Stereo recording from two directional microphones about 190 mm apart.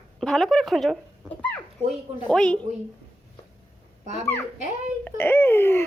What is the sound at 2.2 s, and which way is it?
Speech, 5° left (ahead or behind).